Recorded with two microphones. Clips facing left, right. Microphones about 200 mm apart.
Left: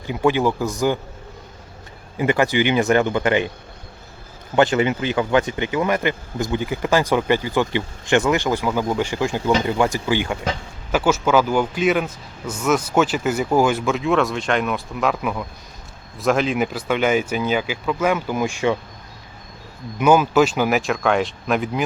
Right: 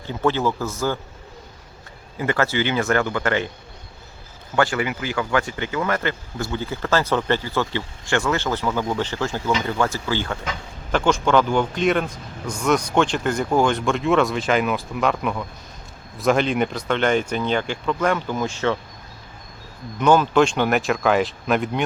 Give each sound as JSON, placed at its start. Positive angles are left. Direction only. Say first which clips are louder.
{"t": 0.0, "sound": "speech", "louder": "left 3 dB", "side_deg": 15}
{"t": 2.1, "sound": "speech", "louder": "left 3 dB", "side_deg": 15}
{"t": 4.5, "sound": "speech", "louder": "left 4 dB", "side_deg": 20}
{"t": 20.0, "sound": "speech", "louder": "left 1 dB", "side_deg": 10}